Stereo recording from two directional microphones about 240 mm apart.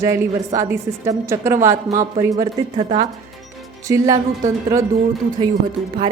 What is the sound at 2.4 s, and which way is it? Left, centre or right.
Speech, right.